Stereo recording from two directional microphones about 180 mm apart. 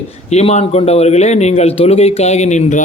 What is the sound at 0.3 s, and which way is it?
Speech, 35° left (ahead or behind).